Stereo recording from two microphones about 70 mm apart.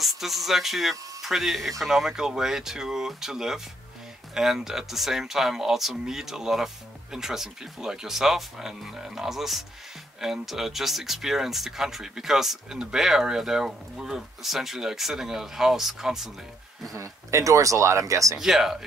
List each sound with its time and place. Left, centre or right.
0.0 s speech: centre
16.9 s speech: right
18.4 s speech: centre